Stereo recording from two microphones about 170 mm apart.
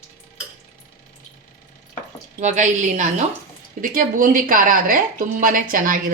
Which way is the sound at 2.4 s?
45° right (ahead or behind).